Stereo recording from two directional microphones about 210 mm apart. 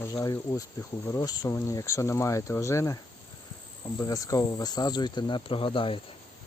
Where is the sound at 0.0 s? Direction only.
15° left (ahead or behind).